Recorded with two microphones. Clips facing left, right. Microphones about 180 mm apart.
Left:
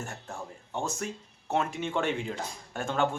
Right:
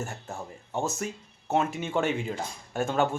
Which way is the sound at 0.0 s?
5° right (ahead or behind).